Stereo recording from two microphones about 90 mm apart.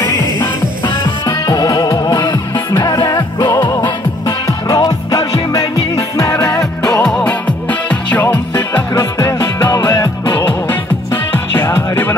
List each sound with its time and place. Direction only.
1.2 s music: 40° left (ahead or behind); by 3.7 s 60° left (ahead or behind)
4.5 s music: 40° left (ahead or behind)
6.3 s music: 20° left (ahead or behind)
7.0 s music: 10° left (ahead or behind); by 9.7 s 30° left (ahead or behind)
9.7 s music: 45° left (ahead or behind)
11.3 s music: 25° left (ahead or behind)